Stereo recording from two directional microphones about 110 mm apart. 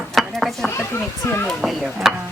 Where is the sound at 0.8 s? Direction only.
20° left (ahead or behind).